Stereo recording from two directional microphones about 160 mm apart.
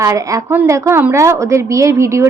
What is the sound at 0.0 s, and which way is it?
A woman's voice, 20° right (ahead or behind).